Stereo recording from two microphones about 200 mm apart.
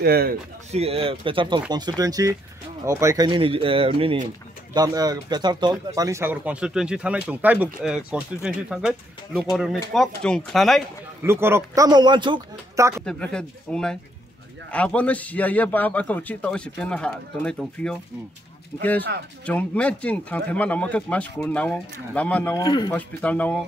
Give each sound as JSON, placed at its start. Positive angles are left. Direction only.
{"t": 0.0, "sound": "speech", "side_deg": -50}
{"t": 0.7, "sound": "speech", "side_deg": -30}
{"t": 11.2, "sound": "speech", "side_deg": -10}
{"t": 13.0, "sound": "a man's voice", "side_deg": 5}
{"t": 22.6, "sound": "speech", "side_deg": 20}
{"t": 22.9, "sound": "a man's voice", "side_deg": 5}